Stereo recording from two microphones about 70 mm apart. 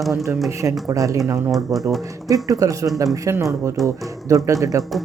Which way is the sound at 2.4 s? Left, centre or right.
Right.